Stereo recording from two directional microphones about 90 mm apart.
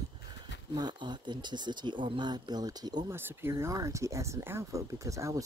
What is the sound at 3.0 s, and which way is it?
Speech, 25° right (ahead or behind).